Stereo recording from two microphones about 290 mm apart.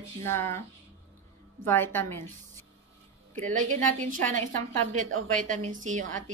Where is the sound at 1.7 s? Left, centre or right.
Centre.